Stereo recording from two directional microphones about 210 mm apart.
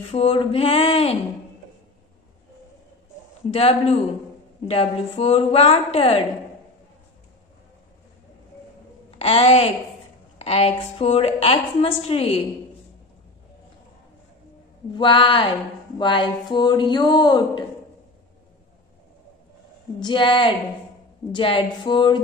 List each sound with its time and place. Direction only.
0.1 s a woman's voice: 25° left (ahead or behind)
3.4 s a woman's voice: 30° left (ahead or behind)
9.2 s a woman's voice: 25° left (ahead or behind)
14.9 s a woman's voice: 25° left (ahead or behind)
20.0 s a woman's voice: 20° left (ahead or behind)